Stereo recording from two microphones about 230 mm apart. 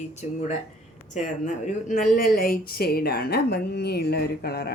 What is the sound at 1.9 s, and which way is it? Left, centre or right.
A woman's voice, left.